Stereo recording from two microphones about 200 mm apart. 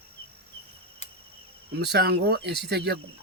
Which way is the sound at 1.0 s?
30° left (ahead or behind).